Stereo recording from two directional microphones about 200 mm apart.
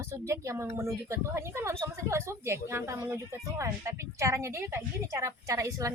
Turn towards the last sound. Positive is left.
turn(degrees=-15)  # may be behind; listen again after turning